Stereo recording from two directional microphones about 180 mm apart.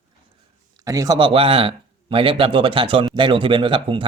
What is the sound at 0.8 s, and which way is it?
Speech, 20° right (ahead or behind).